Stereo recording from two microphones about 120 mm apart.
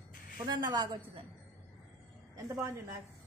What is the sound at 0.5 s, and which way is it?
Speech, 35° right (ahead or behind).